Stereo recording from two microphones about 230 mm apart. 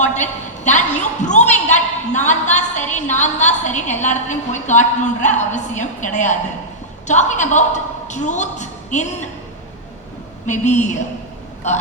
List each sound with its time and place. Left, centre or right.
0.0 s a woman's voice: left
10.4 s a woman's voice: left